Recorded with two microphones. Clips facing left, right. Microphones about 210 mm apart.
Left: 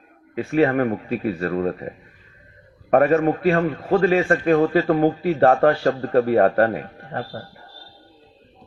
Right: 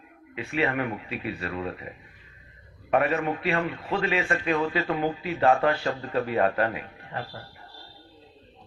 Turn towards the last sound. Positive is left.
turn(degrees=50)  # may be behind; listen again after turning